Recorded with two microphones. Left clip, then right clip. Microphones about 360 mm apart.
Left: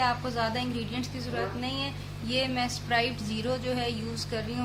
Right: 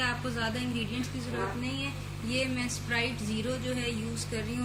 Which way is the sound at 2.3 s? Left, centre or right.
Centre.